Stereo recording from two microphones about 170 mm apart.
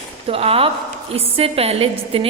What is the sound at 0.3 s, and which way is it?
A woman's voice, 35° right (ahead or behind).